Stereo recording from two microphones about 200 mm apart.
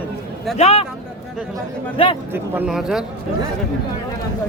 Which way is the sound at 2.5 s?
5° right (ahead or behind).